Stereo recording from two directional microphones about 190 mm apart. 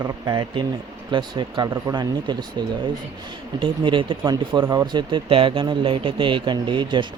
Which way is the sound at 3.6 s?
25° right (ahead or behind).